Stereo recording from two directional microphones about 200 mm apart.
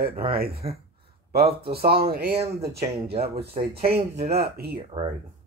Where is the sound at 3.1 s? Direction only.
50° right (ahead or behind).